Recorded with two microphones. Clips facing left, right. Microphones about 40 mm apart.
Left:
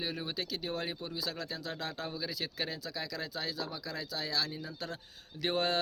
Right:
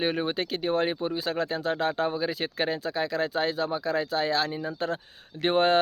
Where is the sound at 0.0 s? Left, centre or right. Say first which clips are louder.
Right 10 dB; right.